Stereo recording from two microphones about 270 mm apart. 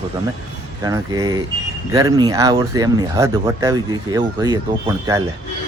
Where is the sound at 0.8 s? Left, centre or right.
Centre.